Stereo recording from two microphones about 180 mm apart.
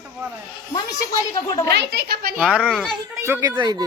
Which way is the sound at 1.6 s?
65° right (ahead or behind).